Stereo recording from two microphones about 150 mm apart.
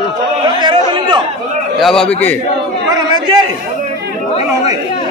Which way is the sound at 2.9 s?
30° right (ahead or behind).